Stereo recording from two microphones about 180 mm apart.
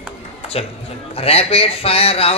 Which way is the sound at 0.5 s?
35° left (ahead or behind).